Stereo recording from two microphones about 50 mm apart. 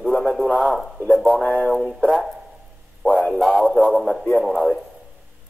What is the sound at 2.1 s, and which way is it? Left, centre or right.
Speech, centre.